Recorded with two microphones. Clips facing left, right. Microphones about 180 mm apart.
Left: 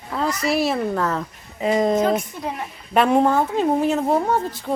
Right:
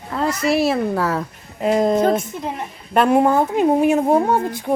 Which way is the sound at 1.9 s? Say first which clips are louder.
Right 2 dB; 30° right (ahead or behind).